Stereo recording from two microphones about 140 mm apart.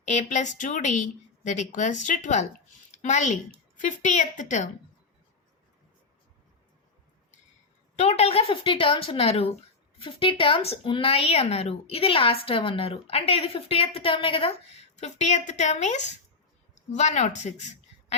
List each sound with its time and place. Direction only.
0.0 s a woman's voice: 60° left (ahead or behind)
7.9 s a woman's voice: 50° left (ahead or behind)
14.9 s a woman's voice: 55° left (ahead or behind)